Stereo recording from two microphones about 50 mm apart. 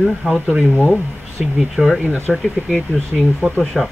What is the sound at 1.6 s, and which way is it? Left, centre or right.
Speech, centre.